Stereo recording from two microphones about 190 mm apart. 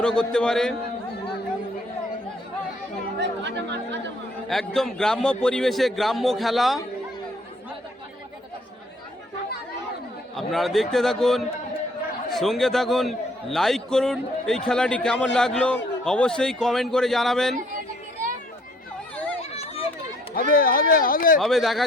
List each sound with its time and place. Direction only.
0.0 s a man's voice: 5° left (ahead or behind)
3.2 s chatter: 65° right (ahead or behind)
4.4 s a man's voice: centre (ahead or behind)
10.3 s a man's voice: centre (ahead or behind)
19.5 s a sound: 30° left (ahead or behind)
20.3 s speech: 50° left (ahead or behind)
21.4 s a man's voice: centre (ahead or behind)